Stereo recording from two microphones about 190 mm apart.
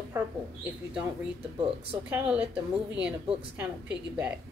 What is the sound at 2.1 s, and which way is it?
Speech, 5° right (ahead or behind).